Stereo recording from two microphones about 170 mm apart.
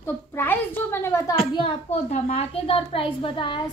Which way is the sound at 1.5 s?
35° left (ahead or behind).